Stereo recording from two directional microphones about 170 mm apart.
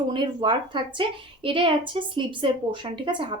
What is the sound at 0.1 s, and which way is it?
A woman's voice, 25° right (ahead or behind).